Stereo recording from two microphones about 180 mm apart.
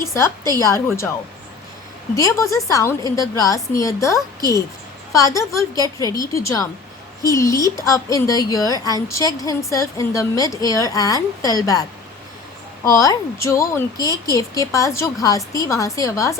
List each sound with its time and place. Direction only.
0.0 s a woman's voice: 15° left (ahead or behind)
2.1 s a woman's voice: 15° left (ahead or behind)